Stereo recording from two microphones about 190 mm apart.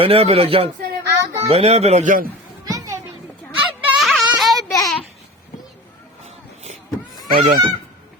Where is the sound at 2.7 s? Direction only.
20° right (ahead or behind).